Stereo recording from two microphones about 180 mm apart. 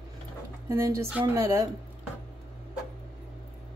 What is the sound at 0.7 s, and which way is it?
Speech, 15° right (ahead or behind).